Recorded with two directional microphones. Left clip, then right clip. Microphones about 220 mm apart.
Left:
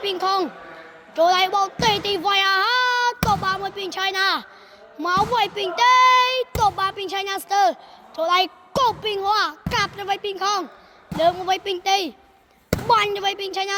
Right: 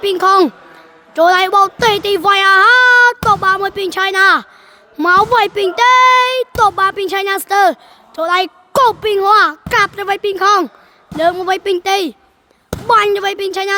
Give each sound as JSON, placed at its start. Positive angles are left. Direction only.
{"t": 0.0, "sound": "a woman's voice", "side_deg": -35}
{"t": 13.1, "sound": "a woman's voice", "side_deg": -30}